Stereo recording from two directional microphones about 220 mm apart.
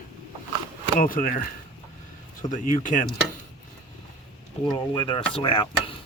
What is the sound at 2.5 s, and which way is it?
Speech, 35° left (ahead or behind).